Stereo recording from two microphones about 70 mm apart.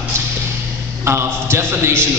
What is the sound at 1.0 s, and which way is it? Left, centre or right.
A man's voice, right.